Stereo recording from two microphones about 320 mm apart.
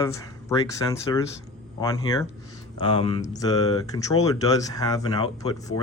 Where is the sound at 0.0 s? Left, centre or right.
Centre.